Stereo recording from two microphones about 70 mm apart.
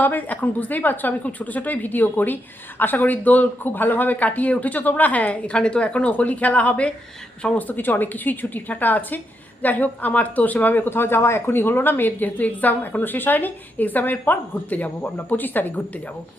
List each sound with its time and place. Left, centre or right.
0.0 s a woman's voice: left